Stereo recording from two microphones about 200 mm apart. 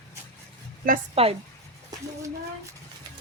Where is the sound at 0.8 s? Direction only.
45° right (ahead or behind).